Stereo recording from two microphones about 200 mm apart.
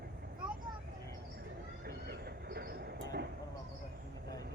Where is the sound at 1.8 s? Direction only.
55° right (ahead or behind).